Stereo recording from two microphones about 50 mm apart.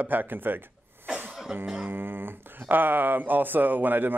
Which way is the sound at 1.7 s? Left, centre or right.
Right.